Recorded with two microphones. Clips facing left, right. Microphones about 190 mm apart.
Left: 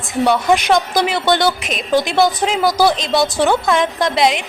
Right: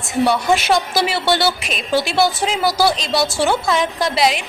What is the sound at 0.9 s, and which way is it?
Speech, 5° right (ahead or behind).